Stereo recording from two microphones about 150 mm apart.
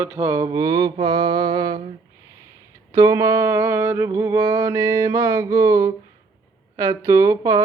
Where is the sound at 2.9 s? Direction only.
20° right (ahead or behind).